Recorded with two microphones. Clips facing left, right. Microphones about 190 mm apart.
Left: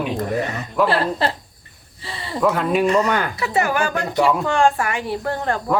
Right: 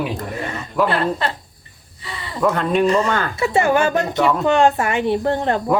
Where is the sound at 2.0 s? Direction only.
30° left (ahead or behind).